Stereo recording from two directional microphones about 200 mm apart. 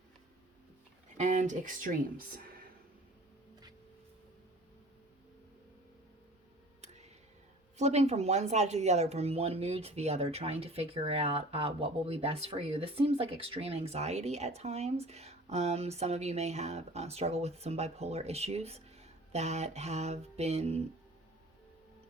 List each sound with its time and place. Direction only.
1.1 s speech: 35° right (ahead or behind)
7.8 s speech: 35° right (ahead or behind)